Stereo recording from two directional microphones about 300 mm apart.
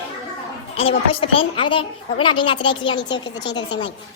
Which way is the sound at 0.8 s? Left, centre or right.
Centre.